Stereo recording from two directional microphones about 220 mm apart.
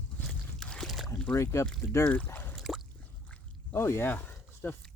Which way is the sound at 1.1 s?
10° left (ahead or behind).